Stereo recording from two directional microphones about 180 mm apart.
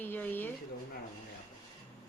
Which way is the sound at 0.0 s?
10° left (ahead or behind).